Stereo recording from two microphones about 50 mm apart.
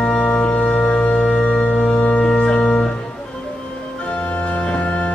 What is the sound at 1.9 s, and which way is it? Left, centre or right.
Music, left.